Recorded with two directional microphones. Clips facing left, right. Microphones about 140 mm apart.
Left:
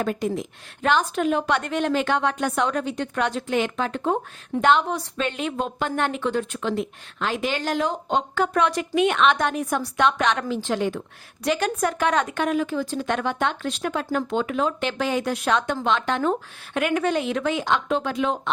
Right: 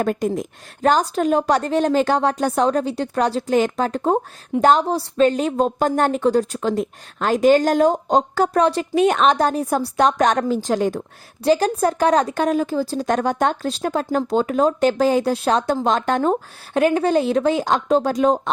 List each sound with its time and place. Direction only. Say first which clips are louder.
0.0 s speech: right 4 dB; 45° right (ahead or behind)